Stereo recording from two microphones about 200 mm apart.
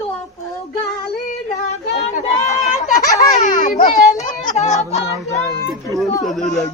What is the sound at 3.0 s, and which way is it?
Baby laughter, 15° left (ahead or behind).